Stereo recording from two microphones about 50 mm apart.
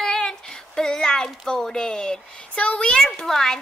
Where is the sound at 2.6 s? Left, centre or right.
Left.